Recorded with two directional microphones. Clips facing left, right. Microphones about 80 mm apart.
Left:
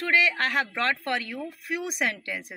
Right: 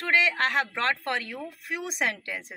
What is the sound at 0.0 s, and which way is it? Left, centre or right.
Speech, right.